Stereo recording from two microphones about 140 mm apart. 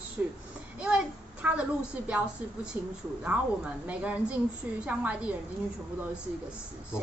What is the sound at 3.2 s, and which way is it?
A woman's voice, 10° right (ahead or behind).